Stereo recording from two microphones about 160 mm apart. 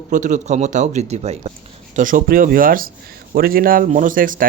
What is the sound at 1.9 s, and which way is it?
Speech, 55° right (ahead or behind).